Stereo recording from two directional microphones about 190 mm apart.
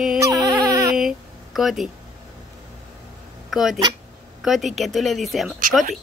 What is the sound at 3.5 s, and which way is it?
Speech, centre (ahead or behind).